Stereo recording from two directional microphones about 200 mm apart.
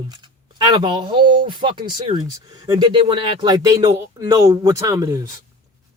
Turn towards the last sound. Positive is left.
turn(degrees=-15)  # may be behind; listen again after turning